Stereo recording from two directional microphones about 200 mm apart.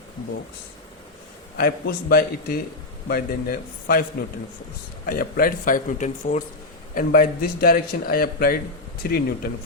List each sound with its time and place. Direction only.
1.5 s a man's voice: 50° left (ahead or behind)
5.0 s a man's voice: 45° left (ahead or behind)